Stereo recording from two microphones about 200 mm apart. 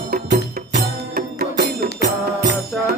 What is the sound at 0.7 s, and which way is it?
Music, 50° right (ahead or behind).